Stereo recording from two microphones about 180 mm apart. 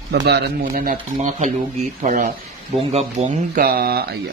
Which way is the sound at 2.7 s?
35° right (ahead or behind).